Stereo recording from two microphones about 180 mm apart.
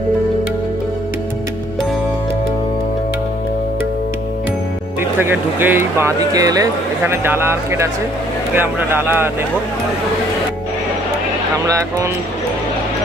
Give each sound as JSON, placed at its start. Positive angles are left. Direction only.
{"t": 5.2, "sound": "speech", "side_deg": -10}
{"t": 11.6, "sound": "speech", "side_deg": -15}